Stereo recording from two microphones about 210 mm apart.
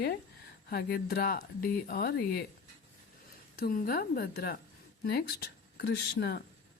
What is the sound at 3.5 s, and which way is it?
Speech, 40° left (ahead or behind).